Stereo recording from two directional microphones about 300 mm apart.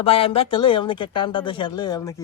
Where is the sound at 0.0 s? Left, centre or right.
Centre.